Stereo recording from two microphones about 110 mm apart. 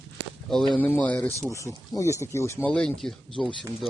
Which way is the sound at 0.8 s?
15° left (ahead or behind).